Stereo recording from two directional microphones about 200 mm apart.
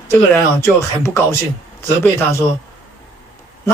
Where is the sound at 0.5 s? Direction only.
15° left (ahead or behind).